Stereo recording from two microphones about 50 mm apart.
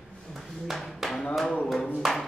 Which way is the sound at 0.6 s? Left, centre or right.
Centre.